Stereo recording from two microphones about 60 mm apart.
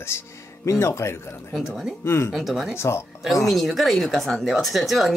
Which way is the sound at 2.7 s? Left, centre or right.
Left.